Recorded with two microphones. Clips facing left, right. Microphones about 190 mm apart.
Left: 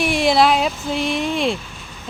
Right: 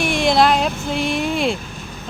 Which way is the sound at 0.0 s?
5° left (ahead or behind).